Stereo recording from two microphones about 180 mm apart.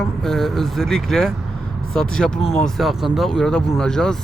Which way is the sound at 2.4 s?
40° left (ahead or behind).